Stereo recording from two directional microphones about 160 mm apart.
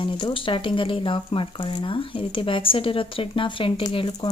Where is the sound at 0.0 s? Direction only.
30° left (ahead or behind).